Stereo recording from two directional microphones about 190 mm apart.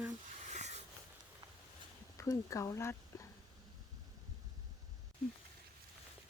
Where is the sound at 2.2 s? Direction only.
15° left (ahead or behind).